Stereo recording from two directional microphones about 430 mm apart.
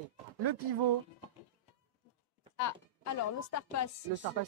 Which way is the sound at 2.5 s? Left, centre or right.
Left.